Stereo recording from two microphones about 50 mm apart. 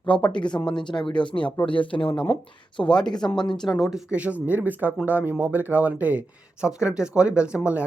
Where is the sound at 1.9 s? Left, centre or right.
Left.